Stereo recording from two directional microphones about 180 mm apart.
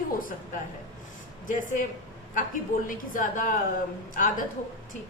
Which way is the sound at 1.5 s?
45° left (ahead or behind).